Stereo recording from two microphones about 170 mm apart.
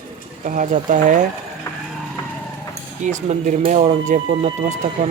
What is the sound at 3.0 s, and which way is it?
Speech, 45° right (ahead or behind).